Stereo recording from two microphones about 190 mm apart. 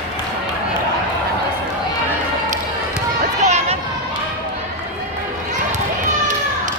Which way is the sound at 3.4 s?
35° right (ahead or behind).